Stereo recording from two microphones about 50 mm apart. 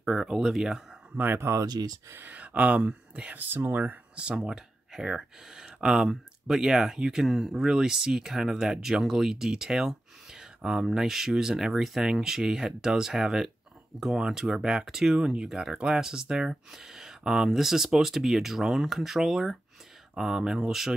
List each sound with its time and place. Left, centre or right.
0.0 s speech: centre
1.1 s speech: right
1.4 s speech: right
2.1 s speech: right
2.4 s speech: right
4.1 s speech: centre